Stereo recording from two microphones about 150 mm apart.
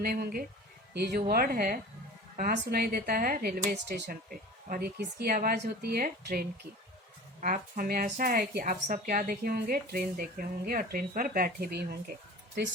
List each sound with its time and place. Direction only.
0.0 s a woman's voice: 85° right
0.9 s speech: 90° right
2.3 s a woman's voice: 65° right (ahead or behind); by 6.5 s 80° right
7.4 s a woman's voice: 70° right (ahead or behind); by 11.9 s 90° right